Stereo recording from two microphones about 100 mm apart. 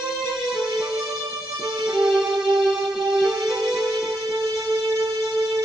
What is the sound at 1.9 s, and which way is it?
Music, 5° right (ahead or behind).